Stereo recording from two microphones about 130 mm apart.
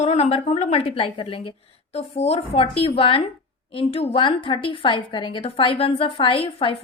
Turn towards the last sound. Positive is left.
turn(degrees=40)  # may be behind; listen again after turning